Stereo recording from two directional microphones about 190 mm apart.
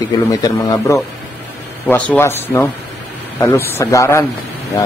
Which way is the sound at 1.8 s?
10° left (ahead or behind).